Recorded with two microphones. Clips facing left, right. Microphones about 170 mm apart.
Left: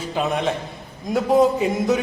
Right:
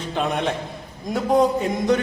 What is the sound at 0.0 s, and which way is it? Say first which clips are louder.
A man's voice: left 1 dB; 5° left (ahead or behind).